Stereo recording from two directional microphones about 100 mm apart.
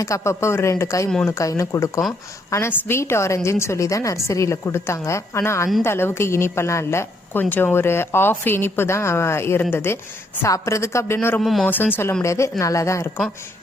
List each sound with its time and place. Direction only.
0.0 s a woman's voice: 30° left (ahead or behind)
11.3 s speech: centre (ahead or behind)
11.6 s a woman's voice: 20° left (ahead or behind)